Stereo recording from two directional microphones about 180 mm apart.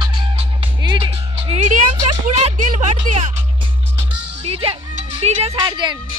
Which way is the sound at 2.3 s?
40° right (ahead or behind).